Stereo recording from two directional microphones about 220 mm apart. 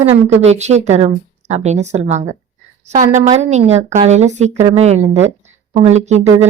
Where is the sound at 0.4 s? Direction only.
30° right (ahead or behind).